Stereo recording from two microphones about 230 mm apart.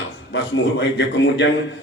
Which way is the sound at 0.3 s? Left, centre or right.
Left.